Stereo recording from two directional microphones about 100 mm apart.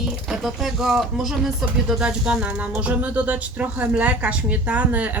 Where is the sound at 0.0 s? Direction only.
5° right (ahead or behind).